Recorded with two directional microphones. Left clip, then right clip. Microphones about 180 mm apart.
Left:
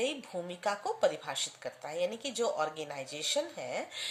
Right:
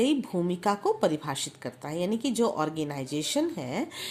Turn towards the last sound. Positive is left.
turn(degrees=-30)  # may be behind; listen again after turning